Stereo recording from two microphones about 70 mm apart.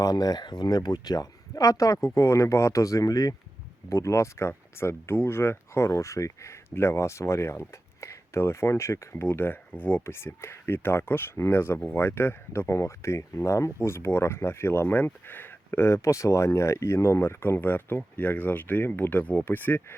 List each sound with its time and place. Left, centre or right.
0.0 s speech: left
3.8 s speech: left
9.2 s speech: left